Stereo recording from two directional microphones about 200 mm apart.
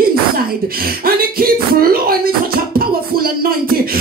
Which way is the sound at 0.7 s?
50° right (ahead or behind).